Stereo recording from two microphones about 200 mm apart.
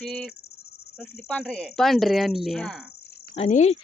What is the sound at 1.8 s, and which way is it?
Speech, centre (ahead or behind).